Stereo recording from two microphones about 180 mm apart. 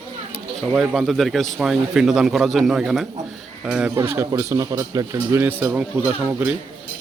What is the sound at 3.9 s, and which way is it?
A man's voice, 15° right (ahead or behind).